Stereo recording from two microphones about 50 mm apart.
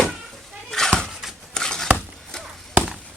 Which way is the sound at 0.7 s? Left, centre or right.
Centre.